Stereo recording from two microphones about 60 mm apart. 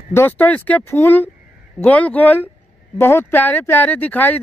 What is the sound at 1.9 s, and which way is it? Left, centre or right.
Speech, left.